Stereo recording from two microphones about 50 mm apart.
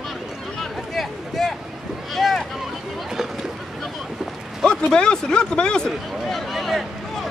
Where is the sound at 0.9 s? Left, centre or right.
Centre.